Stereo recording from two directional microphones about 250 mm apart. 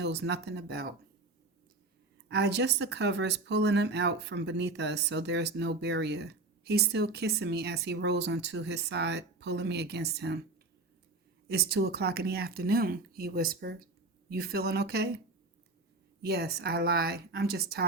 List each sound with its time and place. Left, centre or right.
0.0 s speech: right
2.3 s speech: right
11.4 s speech: right
16.2 s speech: right